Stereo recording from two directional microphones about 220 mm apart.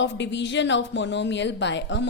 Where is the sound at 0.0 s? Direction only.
55° left (ahead or behind).